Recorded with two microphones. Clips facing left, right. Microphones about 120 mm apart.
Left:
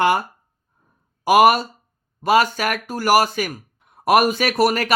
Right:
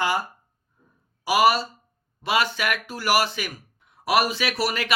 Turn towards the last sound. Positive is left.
turn(degrees=45)  # may be behind; listen again after turning